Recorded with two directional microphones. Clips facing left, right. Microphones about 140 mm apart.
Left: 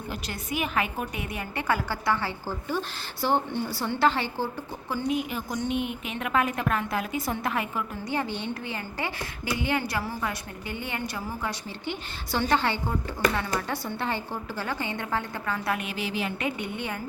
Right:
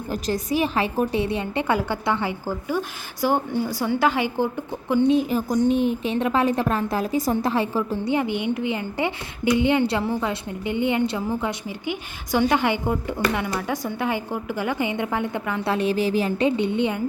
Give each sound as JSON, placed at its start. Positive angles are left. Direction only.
{"t": 0.1, "sound": "a woman's voice", "side_deg": -35}
{"t": 4.9, "sound": "a woman's voice", "side_deg": -25}
{"t": 8.1, "sound": "a woman's voice", "side_deg": -15}
{"t": 16.4, "sound": "a woman's voice", "side_deg": -25}